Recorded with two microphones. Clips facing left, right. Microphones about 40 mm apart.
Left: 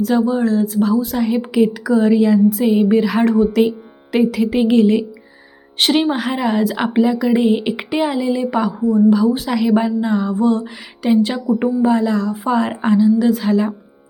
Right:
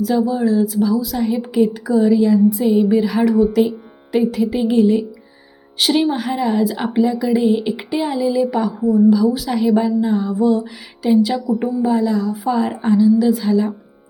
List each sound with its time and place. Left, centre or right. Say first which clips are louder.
0.0 s a woman's voice: left 1 dB; left
3.3 s a woman's voice: right 1 dB; left
4.1 s speech: left 1 dB; left
5.7 s a woman's voice: left 1 dB; left
6.1 s a woman's voice: even; left
7.3 s a woman's voice: left 1 dB; left
9.5 s a woman's voice: even; left
12.8 s a woman's voice: right 1 dB; left